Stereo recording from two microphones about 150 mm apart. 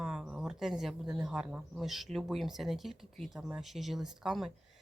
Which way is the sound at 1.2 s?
5° right (ahead or behind).